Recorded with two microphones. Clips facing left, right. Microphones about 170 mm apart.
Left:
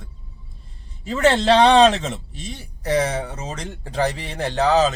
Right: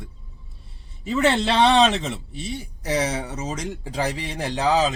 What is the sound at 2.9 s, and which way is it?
Speech, 55° left (ahead or behind).